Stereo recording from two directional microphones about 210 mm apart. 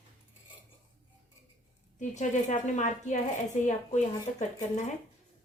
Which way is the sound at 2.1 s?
35° left (ahead or behind).